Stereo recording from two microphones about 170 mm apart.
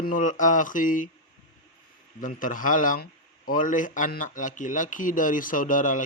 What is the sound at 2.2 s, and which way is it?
A man's voice, 50° left (ahead or behind).